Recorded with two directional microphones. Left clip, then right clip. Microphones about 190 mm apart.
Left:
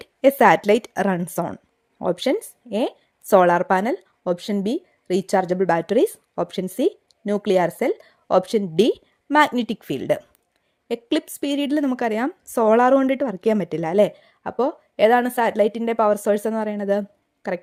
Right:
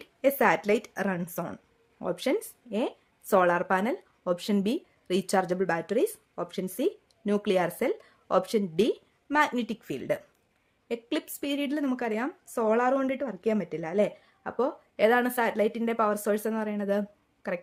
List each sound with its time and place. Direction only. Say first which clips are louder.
0.0 s a woman's voice: left 9 dB; 40° left (ahead or behind)